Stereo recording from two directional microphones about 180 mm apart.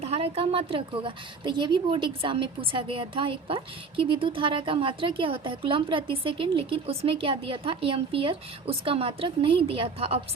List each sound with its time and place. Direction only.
0.0 s a woman's voice: 35° right (ahead or behind)